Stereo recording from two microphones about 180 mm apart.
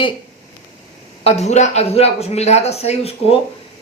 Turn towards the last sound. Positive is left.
turn(degrees=35)  # may be behind; listen again after turning